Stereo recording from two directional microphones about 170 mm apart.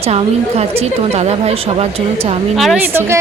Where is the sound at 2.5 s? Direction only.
Centre (ahead or behind).